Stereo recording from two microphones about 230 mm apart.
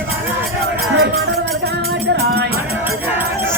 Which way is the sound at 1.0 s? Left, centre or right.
Right.